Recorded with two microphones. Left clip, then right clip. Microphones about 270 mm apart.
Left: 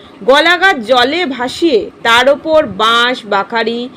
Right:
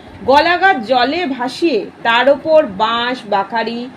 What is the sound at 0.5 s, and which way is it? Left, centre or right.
A woman's voice, left.